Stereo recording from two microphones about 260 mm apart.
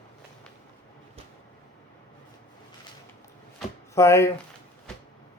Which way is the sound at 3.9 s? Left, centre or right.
Centre.